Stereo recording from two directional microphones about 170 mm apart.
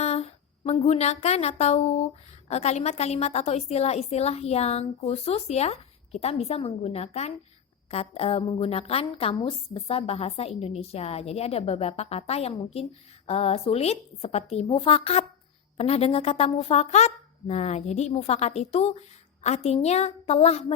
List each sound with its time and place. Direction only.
0.0 s a woman's voice: 40° left (ahead or behind)